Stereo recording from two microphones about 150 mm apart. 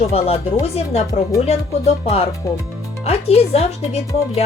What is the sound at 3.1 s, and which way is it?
Speech, 45° left (ahead or behind).